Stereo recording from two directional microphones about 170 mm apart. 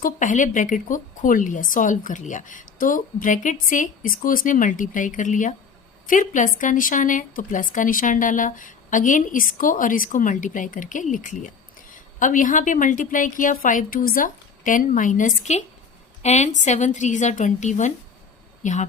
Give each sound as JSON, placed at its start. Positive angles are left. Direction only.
{"t": 0.0, "sound": "a woman's voice", "side_deg": 50}